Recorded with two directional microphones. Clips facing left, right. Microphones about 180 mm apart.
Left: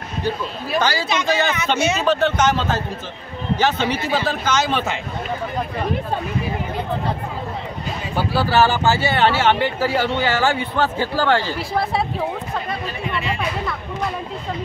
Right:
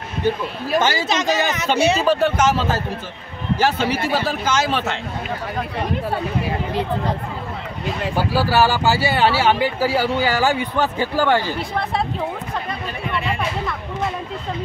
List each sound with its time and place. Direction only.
0.7 s speech: 20° right (ahead or behind)
1.0 s speech: 40° right (ahead or behind)
2.0 s a man's voice: 10° right (ahead or behind)
8.2 s speech: 10° right (ahead or behind)